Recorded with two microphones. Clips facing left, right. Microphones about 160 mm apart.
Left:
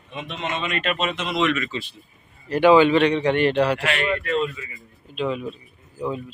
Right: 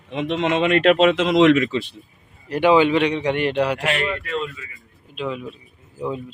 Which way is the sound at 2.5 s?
15° right (ahead or behind).